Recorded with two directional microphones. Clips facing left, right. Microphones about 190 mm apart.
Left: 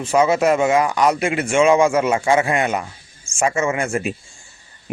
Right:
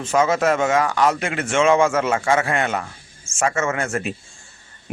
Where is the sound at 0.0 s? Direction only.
10° left (ahead or behind).